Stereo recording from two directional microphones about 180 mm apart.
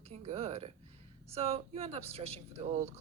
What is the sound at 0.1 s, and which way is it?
Speech, 35° right (ahead or behind).